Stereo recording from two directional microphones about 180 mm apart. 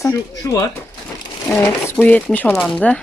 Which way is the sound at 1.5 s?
5° left (ahead or behind).